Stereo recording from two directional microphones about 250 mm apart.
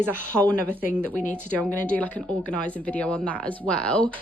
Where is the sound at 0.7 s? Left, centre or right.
Centre.